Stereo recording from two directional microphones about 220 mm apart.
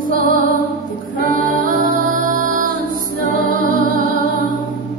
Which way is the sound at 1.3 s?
40° right (ahead or behind).